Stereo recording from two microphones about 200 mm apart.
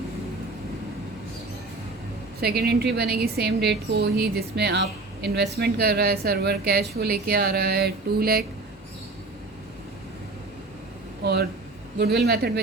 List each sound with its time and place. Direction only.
2.4 s a woman's voice: 50° right (ahead or behind)
11.2 s speech: 55° right (ahead or behind)